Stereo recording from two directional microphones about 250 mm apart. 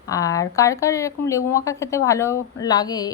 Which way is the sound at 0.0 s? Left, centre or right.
Centre.